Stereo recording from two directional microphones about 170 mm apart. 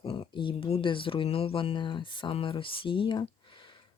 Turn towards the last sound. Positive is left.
turn(degrees=30)  # may be behind; listen again after turning